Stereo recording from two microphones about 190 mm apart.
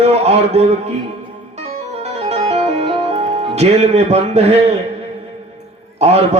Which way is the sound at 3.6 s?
35° right (ahead or behind).